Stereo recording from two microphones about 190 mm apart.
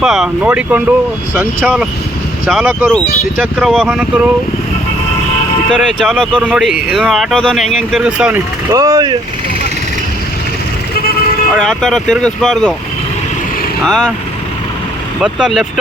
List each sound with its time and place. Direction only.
0.0 s speech: centre (ahead or behind)
5.7 s speech: 5° left (ahead or behind)
8.7 s speech: 20° right (ahead or behind)
11.5 s speech: 5° left (ahead or behind)
13.8 s speech: 5° left (ahead or behind)
15.2 s speech: 5° right (ahead or behind)